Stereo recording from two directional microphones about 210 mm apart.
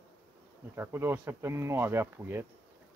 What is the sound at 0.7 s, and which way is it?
Speech, 10° right (ahead or behind).